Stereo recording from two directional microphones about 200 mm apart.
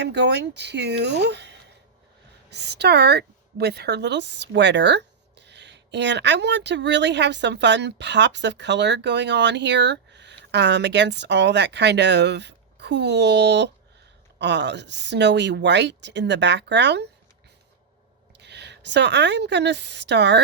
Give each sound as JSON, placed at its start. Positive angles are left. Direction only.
{"t": 0.0, "sound": "a woman's voice", "side_deg": -60}
{"t": 18.3, "sound": "a woman's voice", "side_deg": -60}